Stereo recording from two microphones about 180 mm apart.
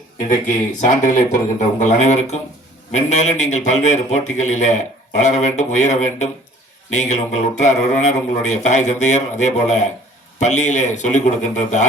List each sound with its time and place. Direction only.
0.2 s speech: 45° left (ahead or behind)